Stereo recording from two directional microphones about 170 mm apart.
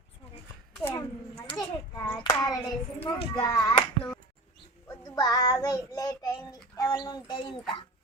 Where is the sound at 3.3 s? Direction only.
20° left (ahead or behind).